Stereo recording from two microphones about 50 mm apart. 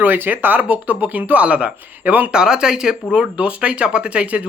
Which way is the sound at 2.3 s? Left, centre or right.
Centre.